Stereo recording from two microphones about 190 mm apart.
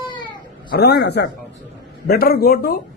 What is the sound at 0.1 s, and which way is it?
Baby cry, 25° left (ahead or behind).